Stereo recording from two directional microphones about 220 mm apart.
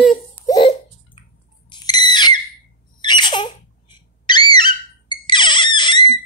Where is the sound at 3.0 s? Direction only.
20° left (ahead or behind).